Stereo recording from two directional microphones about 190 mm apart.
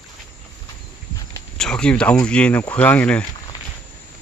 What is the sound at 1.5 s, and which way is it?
Speech, 5° left (ahead or behind).